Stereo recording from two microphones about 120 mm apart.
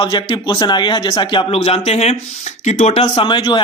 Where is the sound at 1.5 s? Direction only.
60° left (ahead or behind).